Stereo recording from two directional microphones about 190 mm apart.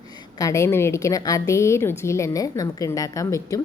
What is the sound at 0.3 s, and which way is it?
A woman's voice, 15° left (ahead or behind).